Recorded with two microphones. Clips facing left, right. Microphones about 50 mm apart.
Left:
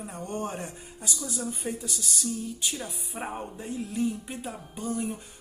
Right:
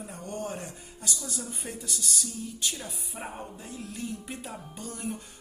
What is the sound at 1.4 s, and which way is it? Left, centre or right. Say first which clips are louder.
Speech: left 6 dB; centre.